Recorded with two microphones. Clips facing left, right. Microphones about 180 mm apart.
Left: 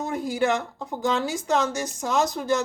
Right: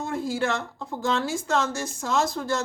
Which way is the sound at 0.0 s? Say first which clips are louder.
Left 2 dB; 20° left (ahead or behind).